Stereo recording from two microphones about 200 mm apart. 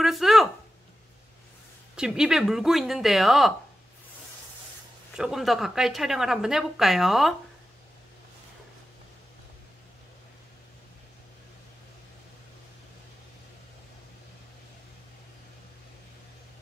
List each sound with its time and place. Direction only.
0.0 s a sound: centre (ahead or behind)
2.0 s a woman's voice: 5° right (ahead or behind)
5.1 s a woman's voice: centre (ahead or behind)